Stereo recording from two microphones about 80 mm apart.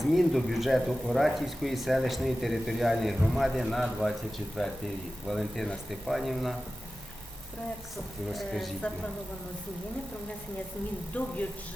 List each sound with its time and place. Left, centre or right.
0.0 s speech: centre
5.3 s speech: centre
8.3 s speech: centre
11.1 s speech: centre